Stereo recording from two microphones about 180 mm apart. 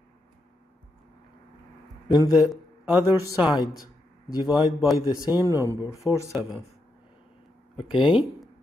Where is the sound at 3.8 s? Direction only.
20° left (ahead or behind).